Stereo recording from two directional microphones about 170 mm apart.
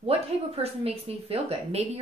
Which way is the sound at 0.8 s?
35° right (ahead or behind).